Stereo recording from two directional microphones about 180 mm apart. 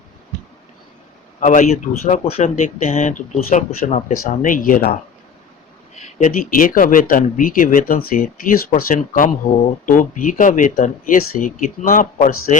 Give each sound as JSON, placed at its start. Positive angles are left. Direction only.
{"t": 1.4, "sound": "speech", "side_deg": 45}
{"t": 6.0, "sound": "speech", "side_deg": 45}